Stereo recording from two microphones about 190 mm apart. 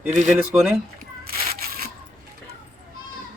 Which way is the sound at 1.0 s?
50° right (ahead or behind).